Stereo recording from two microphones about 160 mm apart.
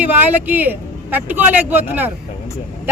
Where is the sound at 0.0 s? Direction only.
10° right (ahead or behind).